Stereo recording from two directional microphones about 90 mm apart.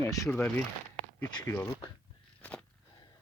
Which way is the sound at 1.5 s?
30° left (ahead or behind).